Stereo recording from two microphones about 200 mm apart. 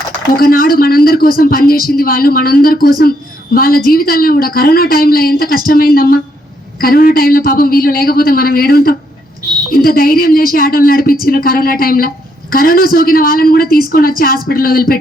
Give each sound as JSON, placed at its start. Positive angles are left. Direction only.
{"t": 0.3, "sound": "a woman's voice", "side_deg": 45}